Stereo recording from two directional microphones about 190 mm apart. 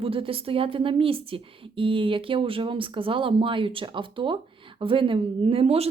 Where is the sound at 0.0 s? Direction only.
30° right (ahead or behind).